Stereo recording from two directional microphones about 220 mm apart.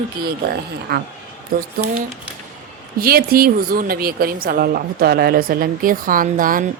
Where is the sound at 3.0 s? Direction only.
45° right (ahead or behind).